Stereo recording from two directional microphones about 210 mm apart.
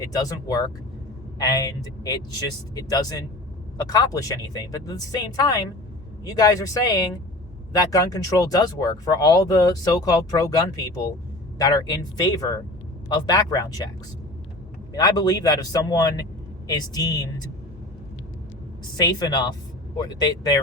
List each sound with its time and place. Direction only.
0.0 s speech: 15° left (ahead or behind)
6.2 s speech: 20° left (ahead or behind)
14.9 s speech: 20° left (ahead or behind)
18.9 s speech: 20° left (ahead or behind)